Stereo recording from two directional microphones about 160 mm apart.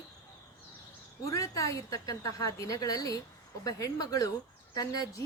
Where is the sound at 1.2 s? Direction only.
20° left (ahead or behind).